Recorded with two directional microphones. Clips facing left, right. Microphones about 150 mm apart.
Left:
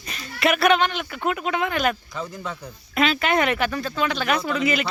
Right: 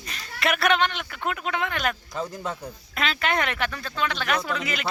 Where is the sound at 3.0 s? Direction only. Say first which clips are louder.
Left 5 dB; 5° left (ahead or behind).